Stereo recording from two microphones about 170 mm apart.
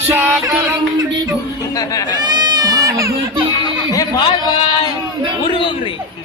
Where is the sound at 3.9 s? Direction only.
30° left (ahead or behind).